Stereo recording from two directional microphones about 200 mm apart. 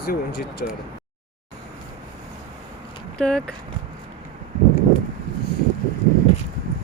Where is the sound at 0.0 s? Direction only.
50° left (ahead or behind).